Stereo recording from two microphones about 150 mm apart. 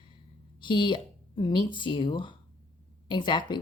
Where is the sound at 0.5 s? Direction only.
30° left (ahead or behind).